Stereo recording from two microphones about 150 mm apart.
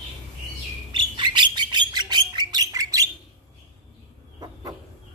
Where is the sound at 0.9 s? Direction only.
30° right (ahead or behind).